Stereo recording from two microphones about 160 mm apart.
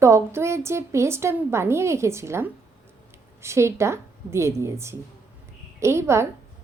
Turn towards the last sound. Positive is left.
turn(degrees=-15)  # may be behind; listen again after turning